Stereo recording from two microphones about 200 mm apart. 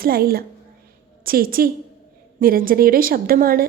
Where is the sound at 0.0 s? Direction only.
50° right (ahead or behind).